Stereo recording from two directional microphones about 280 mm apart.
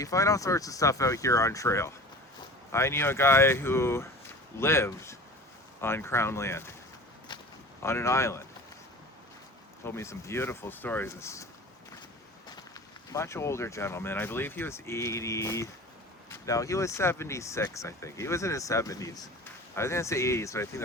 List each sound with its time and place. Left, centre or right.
0.0 s speech: centre
7.3 s a sound: centre
7.8 s speech: centre
9.8 s speech: centre
13.1 s speech: centre